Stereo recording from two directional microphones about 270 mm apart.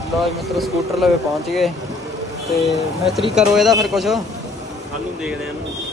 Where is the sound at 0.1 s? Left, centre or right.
Centre.